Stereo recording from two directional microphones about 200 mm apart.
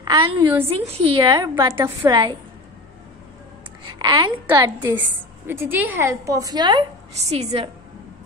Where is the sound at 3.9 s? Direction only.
25° right (ahead or behind).